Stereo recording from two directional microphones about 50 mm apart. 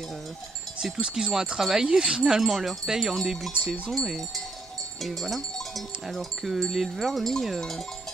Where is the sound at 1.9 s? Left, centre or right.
Centre.